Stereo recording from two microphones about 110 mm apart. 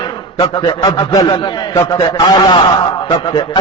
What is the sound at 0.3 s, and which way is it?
A man's voice, 40° left (ahead or behind).